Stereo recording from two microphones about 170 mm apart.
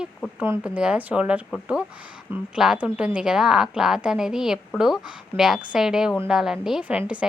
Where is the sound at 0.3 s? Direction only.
10° right (ahead or behind).